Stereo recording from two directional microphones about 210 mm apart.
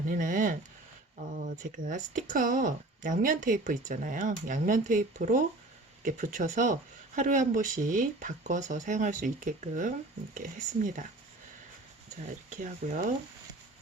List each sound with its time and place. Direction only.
0.1 s speech: 40° right (ahead or behind)
12.5 s speech: 40° right (ahead or behind)